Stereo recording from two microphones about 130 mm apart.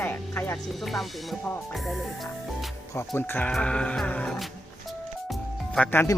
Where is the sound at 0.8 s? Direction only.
Centre (ahead or behind).